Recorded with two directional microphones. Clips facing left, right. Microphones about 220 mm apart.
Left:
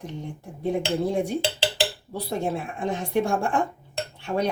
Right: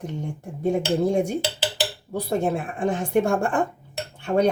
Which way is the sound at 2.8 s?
50° right (ahead or behind).